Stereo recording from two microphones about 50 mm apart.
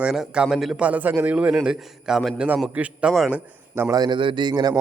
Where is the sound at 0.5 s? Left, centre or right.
Centre.